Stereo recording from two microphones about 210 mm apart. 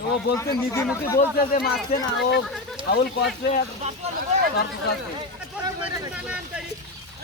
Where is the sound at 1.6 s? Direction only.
50° left (ahead or behind).